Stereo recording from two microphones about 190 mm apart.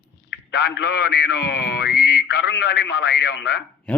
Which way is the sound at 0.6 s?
65° left (ahead or behind).